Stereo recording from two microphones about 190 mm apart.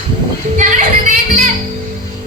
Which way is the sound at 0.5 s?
40° right (ahead or behind).